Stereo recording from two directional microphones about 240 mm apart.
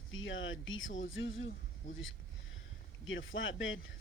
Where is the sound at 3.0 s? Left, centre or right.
Left.